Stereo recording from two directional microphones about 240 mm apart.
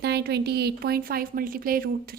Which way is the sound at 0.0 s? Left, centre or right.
Right.